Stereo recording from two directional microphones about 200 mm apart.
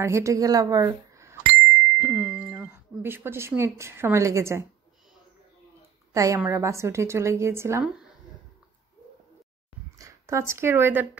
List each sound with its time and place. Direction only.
0.0 s a woman's voice: 15° right (ahead or behind)
6.1 s a woman's voice: 15° right (ahead or behind)
9.9 s speech: 15° right (ahead or behind)